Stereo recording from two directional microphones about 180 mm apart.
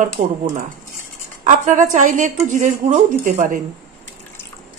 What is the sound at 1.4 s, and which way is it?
A woman's voice, 45° right (ahead or behind).